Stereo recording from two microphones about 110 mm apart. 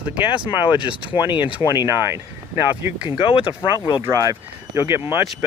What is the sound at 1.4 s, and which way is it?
Speech, 10° right (ahead or behind).